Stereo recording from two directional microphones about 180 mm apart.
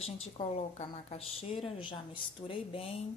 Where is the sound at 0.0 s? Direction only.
35° left (ahead or behind).